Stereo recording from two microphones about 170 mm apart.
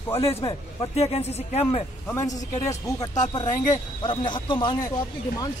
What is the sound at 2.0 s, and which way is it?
Speech, 20° left (ahead or behind).